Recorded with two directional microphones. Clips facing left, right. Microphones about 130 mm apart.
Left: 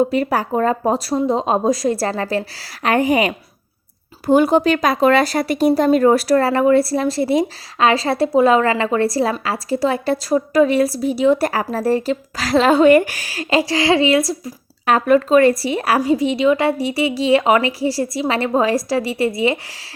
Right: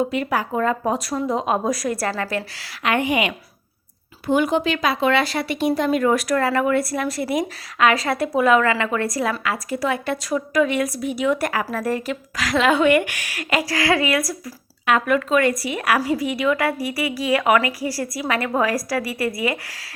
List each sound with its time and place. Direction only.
0.0 s speech: 35° left (ahead or behind)